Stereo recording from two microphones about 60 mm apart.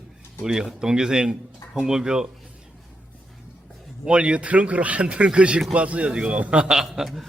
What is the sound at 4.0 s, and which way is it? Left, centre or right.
A man's voice, centre.